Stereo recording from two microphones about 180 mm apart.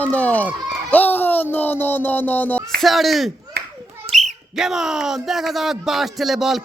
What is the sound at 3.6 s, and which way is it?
Clapping, 60° right (ahead or behind).